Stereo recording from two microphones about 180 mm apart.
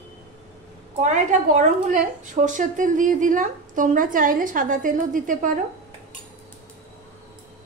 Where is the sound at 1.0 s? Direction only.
40° right (ahead or behind).